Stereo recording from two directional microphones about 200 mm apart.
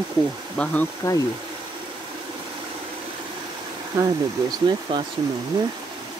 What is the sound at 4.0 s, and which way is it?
Speech, 20° right (ahead or behind).